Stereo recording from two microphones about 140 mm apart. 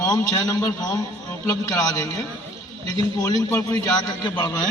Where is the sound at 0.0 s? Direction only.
25° left (ahead or behind).